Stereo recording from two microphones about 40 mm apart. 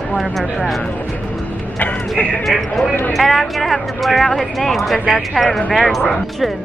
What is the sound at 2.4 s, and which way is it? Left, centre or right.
Speech, centre.